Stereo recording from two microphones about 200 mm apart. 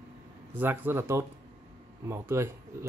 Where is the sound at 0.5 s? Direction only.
10° right (ahead or behind).